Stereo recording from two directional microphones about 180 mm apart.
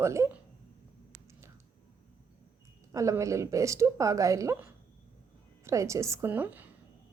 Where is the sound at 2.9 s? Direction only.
15° right (ahead or behind).